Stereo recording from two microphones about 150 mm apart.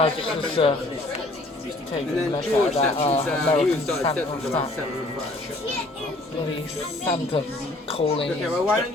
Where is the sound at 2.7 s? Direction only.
45° left (ahead or behind).